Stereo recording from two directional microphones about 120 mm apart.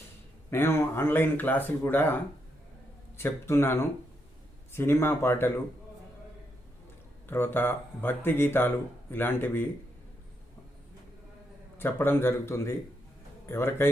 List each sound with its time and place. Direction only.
0.5 s speech: 20° left (ahead or behind)
3.2 s speech: 20° left (ahead or behind)
7.3 s speech: 20° left (ahead or behind)
11.8 s speech: 20° left (ahead or behind)